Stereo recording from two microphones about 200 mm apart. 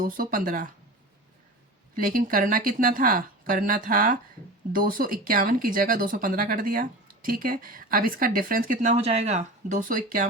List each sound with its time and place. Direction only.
0.0 s speech: 45° right (ahead or behind)
2.0 s speech: 40° right (ahead or behind)